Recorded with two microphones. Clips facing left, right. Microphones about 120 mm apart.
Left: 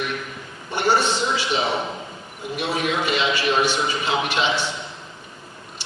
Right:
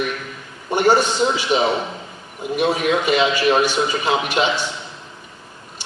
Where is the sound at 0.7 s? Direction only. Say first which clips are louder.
Right 4 dB; 15° right (ahead or behind).